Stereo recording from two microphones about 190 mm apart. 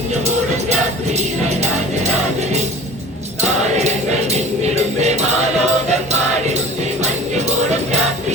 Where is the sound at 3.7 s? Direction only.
35° right (ahead or behind).